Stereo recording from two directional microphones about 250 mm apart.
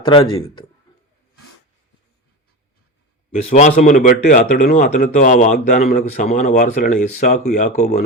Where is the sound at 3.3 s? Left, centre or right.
Left.